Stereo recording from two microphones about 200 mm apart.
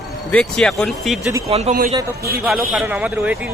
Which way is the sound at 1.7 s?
45° right (ahead or behind).